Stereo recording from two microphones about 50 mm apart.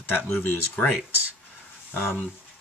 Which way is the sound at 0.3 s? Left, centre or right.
Left.